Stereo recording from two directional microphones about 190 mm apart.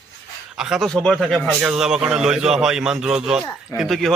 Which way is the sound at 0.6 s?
5° right (ahead or behind).